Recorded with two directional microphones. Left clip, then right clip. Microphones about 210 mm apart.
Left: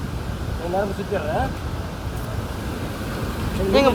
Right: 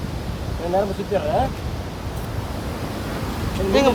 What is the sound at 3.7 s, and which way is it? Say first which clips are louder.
Speech: even; 15° right (ahead or behind).